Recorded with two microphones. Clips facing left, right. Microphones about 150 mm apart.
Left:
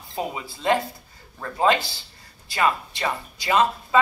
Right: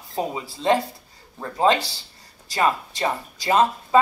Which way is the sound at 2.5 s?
35° right (ahead or behind).